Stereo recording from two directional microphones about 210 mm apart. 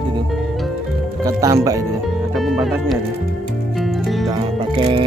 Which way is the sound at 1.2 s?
15° right (ahead or behind).